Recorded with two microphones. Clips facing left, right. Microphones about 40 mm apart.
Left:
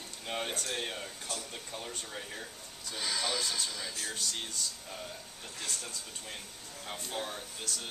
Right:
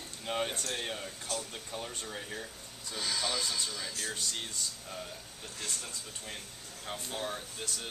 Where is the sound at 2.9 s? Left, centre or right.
Centre.